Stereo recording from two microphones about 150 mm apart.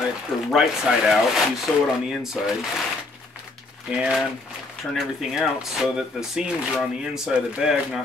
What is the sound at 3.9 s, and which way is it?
Speech, 5° right (ahead or behind).